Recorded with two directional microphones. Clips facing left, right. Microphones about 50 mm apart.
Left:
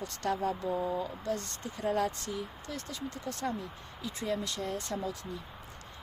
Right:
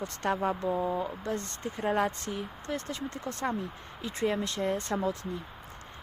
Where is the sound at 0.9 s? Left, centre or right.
Right.